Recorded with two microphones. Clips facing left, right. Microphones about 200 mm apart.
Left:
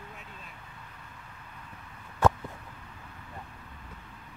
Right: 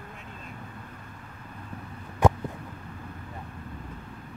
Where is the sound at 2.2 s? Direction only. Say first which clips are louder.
Right 3 dB; 15° right (ahead or behind).